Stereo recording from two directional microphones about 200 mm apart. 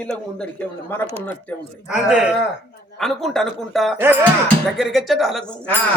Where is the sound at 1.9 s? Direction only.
5° right (ahead or behind).